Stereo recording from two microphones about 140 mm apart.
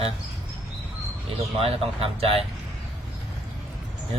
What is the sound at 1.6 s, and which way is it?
Speech, 45° right (ahead or behind).